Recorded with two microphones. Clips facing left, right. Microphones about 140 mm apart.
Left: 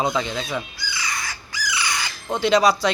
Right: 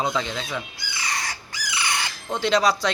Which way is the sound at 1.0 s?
35° right (ahead or behind).